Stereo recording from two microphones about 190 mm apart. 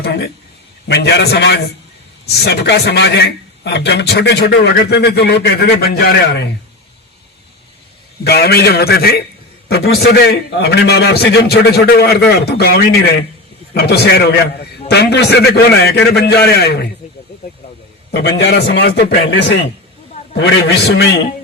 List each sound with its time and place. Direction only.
0.0 s a man's voice: 60° left (ahead or behind)
8.2 s a man's voice: 60° left (ahead or behind)
18.1 s a man's voice: 65° left (ahead or behind)